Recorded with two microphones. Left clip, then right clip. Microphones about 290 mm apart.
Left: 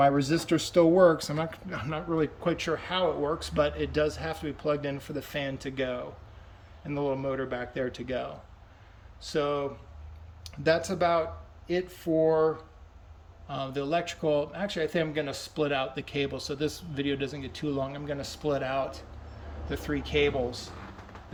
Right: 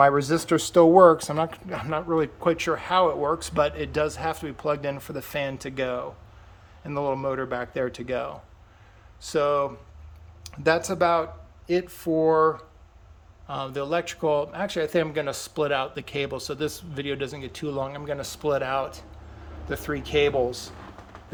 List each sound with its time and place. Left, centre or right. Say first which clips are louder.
0.0 s speech: right 5 dB; centre